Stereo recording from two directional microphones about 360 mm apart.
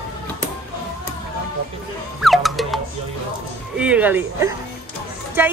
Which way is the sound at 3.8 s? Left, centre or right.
Centre.